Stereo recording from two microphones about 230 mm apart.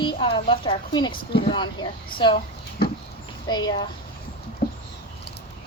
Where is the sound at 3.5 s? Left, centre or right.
Centre.